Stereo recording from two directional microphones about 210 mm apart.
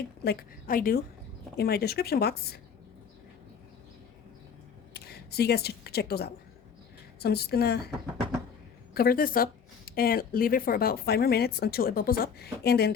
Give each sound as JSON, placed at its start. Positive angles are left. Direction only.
{"t": 0.3, "sound": "speech", "side_deg": 45}
{"t": 4.9, "sound": "speech", "side_deg": 50}
{"t": 9.0, "sound": "speech", "side_deg": 45}